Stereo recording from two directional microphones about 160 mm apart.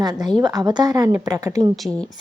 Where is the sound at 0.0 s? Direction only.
25° right (ahead or behind).